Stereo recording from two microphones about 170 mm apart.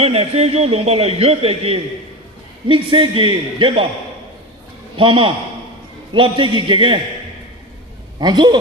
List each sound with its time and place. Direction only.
0.0 s a man's voice: 35° right (ahead or behind)
4.9 s a man's voice: 30° right (ahead or behind)
8.2 s a man's voice: 25° right (ahead or behind)